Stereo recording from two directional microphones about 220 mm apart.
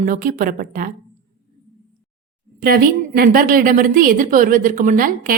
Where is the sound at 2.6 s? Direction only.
40° right (ahead or behind).